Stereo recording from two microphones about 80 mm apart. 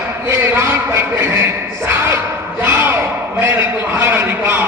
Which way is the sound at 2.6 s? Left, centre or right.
Right.